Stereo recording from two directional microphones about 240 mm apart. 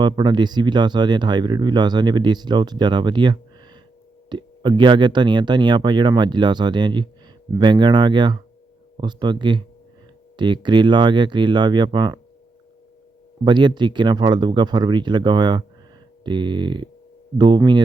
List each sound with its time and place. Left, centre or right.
0.0 s speech: centre
13.4 s speech: centre